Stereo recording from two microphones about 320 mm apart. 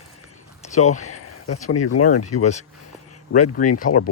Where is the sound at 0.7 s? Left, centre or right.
Left.